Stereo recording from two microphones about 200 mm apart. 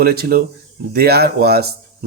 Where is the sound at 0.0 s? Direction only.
50° right (ahead or behind).